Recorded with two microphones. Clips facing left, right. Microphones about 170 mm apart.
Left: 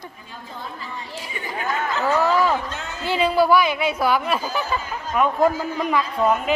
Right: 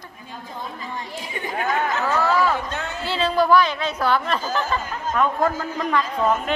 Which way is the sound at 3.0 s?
15° left (ahead or behind).